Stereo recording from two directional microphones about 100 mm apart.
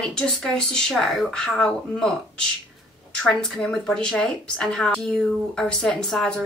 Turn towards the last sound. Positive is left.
turn(degrees=5)  # may be behind; listen again after turning